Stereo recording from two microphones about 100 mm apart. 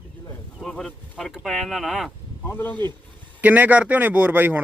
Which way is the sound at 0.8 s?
Centre (ahead or behind).